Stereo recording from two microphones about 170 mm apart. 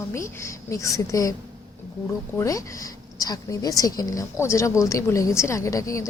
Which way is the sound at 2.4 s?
20° left (ahead or behind).